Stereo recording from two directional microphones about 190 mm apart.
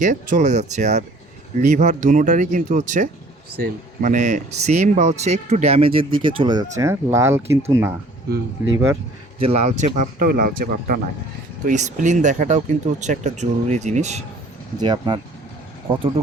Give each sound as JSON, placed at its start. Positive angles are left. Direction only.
{"t": 0.0, "sound": "speech", "side_deg": -40}
{"t": 9.4, "sound": "speech", "side_deg": -35}
{"t": 14.8, "sound": "speech", "side_deg": -25}